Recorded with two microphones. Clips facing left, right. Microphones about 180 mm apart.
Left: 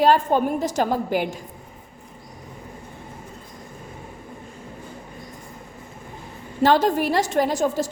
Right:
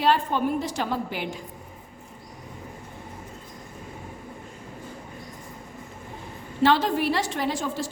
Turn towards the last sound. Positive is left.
turn(degrees=45)  # may be behind; listen again after turning